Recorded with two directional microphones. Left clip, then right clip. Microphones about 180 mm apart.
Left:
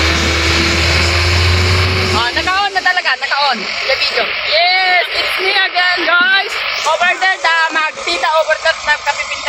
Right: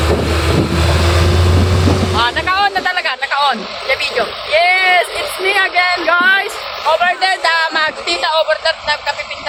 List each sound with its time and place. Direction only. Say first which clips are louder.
2.2 s music: right 1 dB; 30° left (ahead or behind)
4.5 s music: right 1 dB; centre (ahead or behind)
7.0 s music: left 1 dB; 40° left (ahead or behind)